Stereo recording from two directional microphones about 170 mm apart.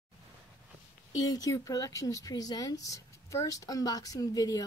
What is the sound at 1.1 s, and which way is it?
Speech, 20° left (ahead or behind).